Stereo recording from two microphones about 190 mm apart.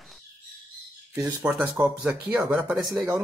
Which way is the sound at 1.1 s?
15° right (ahead or behind).